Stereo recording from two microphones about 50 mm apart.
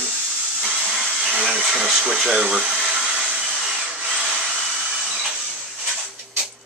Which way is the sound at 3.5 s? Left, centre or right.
Centre.